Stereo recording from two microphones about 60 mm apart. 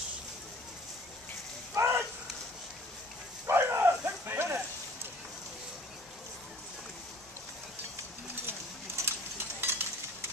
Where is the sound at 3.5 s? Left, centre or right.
Right.